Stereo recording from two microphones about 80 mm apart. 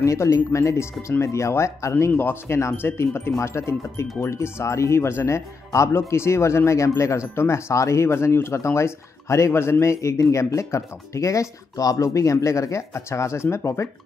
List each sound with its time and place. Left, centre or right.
0.0 s speech: left